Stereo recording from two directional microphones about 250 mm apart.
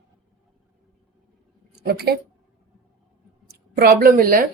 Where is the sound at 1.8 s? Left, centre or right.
Right.